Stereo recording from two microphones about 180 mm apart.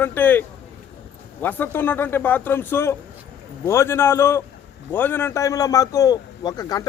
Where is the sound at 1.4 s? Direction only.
10° left (ahead or behind).